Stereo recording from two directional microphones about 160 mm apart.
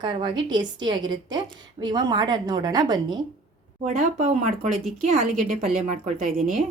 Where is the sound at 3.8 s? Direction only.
50° right (ahead or behind).